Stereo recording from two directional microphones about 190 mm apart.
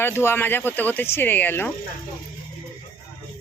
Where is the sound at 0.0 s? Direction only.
10° left (ahead or behind).